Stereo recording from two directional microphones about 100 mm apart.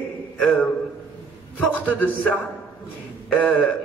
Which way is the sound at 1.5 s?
15° left (ahead or behind).